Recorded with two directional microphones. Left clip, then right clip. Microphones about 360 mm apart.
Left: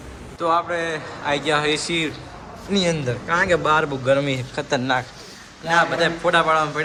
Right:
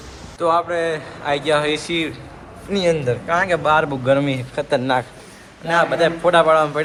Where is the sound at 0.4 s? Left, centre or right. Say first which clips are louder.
Right 3 dB; centre.